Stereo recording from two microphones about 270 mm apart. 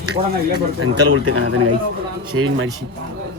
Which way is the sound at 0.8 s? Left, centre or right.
Right.